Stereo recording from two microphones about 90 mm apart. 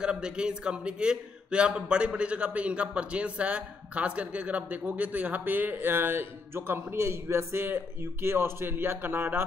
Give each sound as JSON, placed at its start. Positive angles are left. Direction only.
{"t": 0.0, "sound": "a man's voice", "side_deg": -10}